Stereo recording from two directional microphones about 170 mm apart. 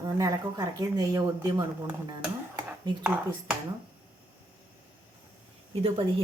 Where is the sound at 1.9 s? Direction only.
10° right (ahead or behind).